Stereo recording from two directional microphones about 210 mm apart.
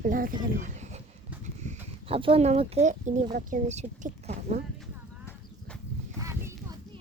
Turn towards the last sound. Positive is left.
turn(degrees=-15)  # may be behind; listen again after turning